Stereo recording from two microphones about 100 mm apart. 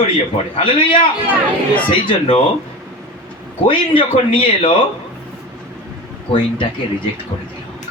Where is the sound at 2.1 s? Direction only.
65° left (ahead or behind).